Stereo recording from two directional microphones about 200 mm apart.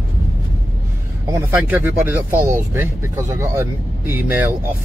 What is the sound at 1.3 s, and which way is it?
Speech, 10° right (ahead or behind).